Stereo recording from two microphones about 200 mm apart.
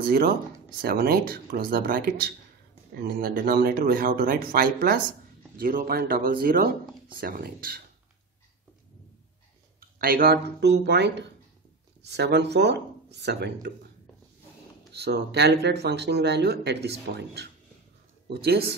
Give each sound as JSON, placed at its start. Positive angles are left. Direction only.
{"t": 0.0, "sound": "speech", "side_deg": -50}
{"t": 9.8, "sound": "speech", "side_deg": -50}
{"t": 14.9, "sound": "speech", "side_deg": -55}